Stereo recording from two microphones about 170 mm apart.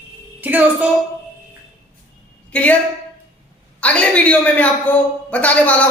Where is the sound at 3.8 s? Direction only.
10° left (ahead or behind).